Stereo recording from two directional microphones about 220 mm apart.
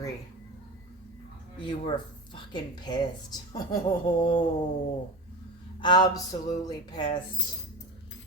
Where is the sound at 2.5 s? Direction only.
20° left (ahead or behind).